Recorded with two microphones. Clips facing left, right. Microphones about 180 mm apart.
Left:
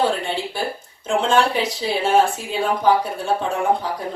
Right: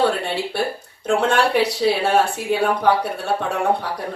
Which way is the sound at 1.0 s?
65° right (ahead or behind).